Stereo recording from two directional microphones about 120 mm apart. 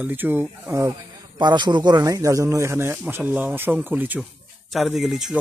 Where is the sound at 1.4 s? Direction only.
40° right (ahead or behind); by 4.2 s 15° right (ahead or behind).